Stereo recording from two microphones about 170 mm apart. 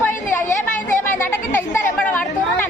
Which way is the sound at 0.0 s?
15° left (ahead or behind).